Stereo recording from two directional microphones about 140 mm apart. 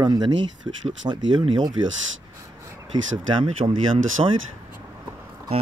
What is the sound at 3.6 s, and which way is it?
Speech, 40° right (ahead or behind).